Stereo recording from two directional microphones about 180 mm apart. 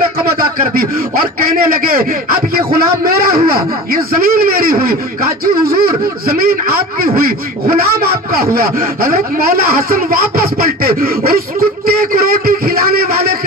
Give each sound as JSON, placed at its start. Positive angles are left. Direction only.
{"t": 0.7, "sound": "a man's voice", "side_deg": -55}
{"t": 10.4, "sound": "speech", "side_deg": -55}